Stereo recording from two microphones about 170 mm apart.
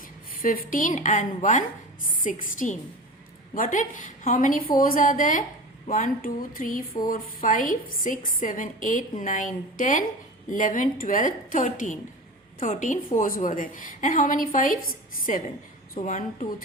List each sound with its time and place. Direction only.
0.4 s a woman's voice: 55° left (ahead or behind)